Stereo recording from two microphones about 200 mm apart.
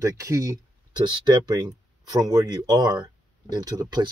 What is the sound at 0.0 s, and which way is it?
Speech, 15° right (ahead or behind).